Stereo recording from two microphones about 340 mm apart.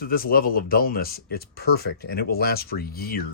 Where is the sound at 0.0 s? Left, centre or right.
Left.